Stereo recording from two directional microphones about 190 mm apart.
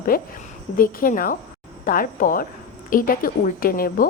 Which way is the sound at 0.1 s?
50° left (ahead or behind).